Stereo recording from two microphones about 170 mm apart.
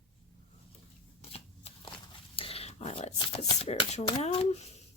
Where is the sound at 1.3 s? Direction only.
35° left (ahead or behind).